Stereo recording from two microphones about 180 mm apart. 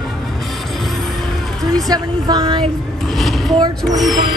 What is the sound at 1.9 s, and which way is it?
Speech, 20° right (ahead or behind).